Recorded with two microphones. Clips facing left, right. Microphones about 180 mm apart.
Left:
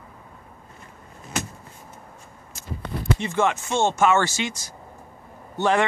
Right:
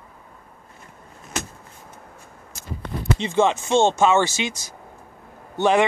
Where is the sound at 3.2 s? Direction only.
25° right (ahead or behind).